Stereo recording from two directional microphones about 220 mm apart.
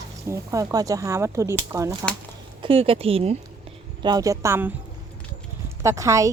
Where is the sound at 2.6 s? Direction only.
25° right (ahead or behind).